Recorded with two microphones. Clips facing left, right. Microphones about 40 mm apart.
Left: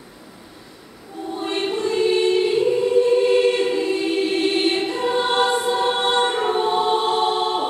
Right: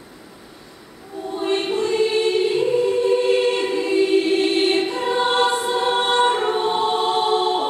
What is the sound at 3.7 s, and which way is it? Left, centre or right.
Choir, centre.